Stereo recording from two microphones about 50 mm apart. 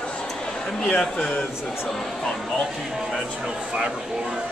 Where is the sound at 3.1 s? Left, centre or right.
Centre.